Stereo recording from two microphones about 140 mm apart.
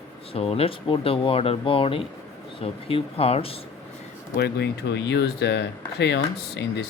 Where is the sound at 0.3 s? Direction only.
45° left (ahead or behind).